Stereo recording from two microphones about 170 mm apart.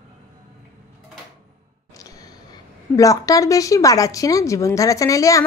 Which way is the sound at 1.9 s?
20° left (ahead or behind).